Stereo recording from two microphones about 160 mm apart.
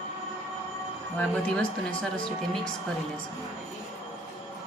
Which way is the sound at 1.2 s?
5° left (ahead or behind).